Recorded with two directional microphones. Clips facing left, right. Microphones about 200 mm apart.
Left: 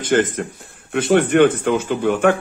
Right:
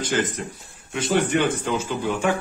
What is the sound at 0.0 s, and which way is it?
Speech, 55° left (ahead or behind).